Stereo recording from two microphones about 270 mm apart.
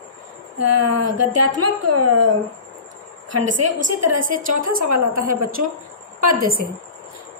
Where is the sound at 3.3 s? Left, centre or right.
Right.